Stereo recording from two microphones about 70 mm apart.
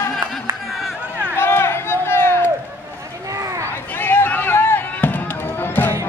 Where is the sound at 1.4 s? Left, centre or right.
Left.